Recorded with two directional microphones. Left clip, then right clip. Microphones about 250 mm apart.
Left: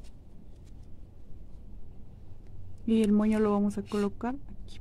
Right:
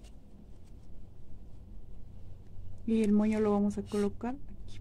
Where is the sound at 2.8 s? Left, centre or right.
Left.